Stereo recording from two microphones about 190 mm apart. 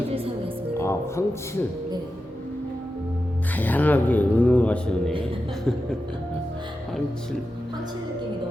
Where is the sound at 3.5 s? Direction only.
10° left (ahead or behind).